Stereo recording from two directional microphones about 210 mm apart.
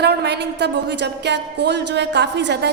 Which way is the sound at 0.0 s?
50° right (ahead or behind).